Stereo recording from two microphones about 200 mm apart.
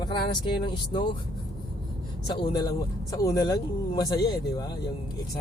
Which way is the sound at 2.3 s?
25° left (ahead or behind).